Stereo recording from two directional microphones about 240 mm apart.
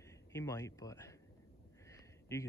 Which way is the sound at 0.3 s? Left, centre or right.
Centre.